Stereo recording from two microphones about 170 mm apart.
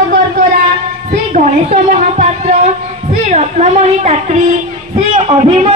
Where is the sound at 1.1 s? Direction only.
45° right (ahead or behind).